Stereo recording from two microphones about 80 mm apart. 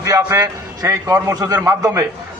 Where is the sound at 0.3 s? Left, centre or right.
Right.